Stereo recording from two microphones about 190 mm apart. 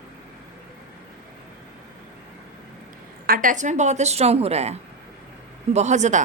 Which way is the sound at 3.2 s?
45° right (ahead or behind).